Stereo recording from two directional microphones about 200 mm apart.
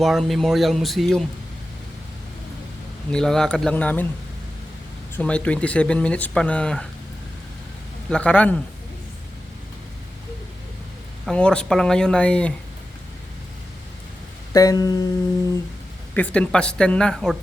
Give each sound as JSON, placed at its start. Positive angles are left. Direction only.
{"t": 0.0, "sound": "speech", "side_deg": 0}
{"t": 3.1, "sound": "speech", "side_deg": 5}
{"t": 5.1, "sound": "speech", "side_deg": 5}
{"t": 8.1, "sound": "speech", "side_deg": 5}
{"t": 11.3, "sound": "speech", "side_deg": 5}
{"t": 14.5, "sound": "a sound", "side_deg": 20}
{"t": 16.1, "sound": "speech", "side_deg": 5}